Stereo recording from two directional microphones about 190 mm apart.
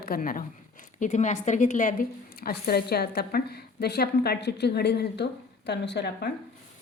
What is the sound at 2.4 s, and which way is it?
A woman's voice, 55° left (ahead or behind).